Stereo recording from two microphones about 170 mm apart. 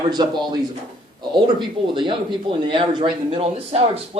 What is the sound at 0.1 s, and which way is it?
A man's voice, 25° right (ahead or behind).